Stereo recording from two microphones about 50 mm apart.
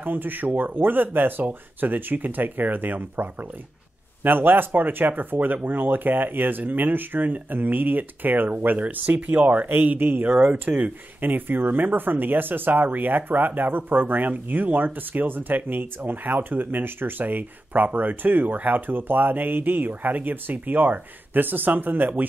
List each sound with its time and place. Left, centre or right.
0.0 s speech: right